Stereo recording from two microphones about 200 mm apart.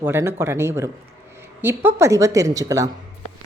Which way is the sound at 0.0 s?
10° right (ahead or behind).